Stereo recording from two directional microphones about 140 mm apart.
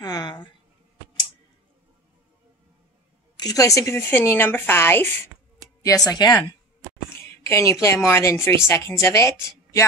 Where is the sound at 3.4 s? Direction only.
25° left (ahead or behind).